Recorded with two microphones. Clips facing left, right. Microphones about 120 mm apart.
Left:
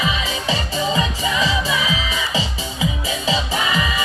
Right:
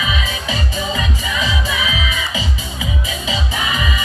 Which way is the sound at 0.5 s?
30° left (ahead or behind).